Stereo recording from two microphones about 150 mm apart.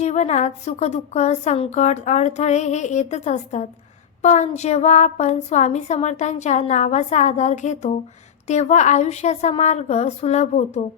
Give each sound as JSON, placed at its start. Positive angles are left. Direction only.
{"t": 0.0, "sound": "a woman's voice", "side_deg": 50}